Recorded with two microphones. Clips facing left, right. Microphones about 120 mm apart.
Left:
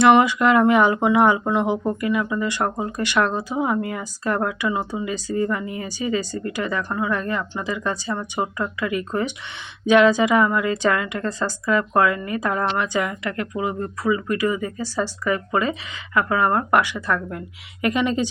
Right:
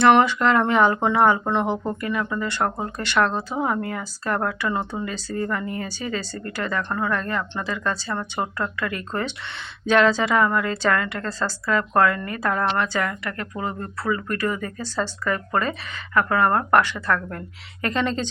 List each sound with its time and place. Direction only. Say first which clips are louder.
0.0 s speech: left 1 dB; 15° left (ahead or behind)